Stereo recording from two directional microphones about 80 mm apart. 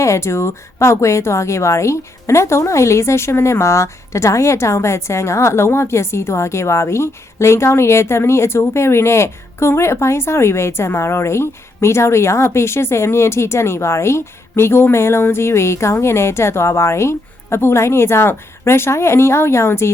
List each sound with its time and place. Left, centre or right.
0.0 s a woman's voice: left